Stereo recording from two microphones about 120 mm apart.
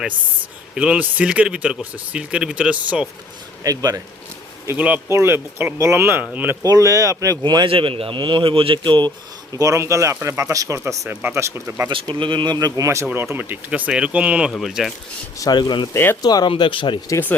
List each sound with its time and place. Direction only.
0.8 s speech: 10° right (ahead or behind)
3.6 s speech: 30° right (ahead or behind)
4.8 s speech: 10° right (ahead or behind)
6.6 s speech: 30° right (ahead or behind)
9.6 s speech: 25° right (ahead or behind)
12.2 s speech: 40° right (ahead or behind); by 14.9 s centre (ahead or behind)
15.4 s speech: 35° left (ahead or behind)
15.9 s speech: 20° left (ahead or behind)
16.2 s speech: 35° left (ahead or behind)
16.5 s speech: 45° left (ahead or behind)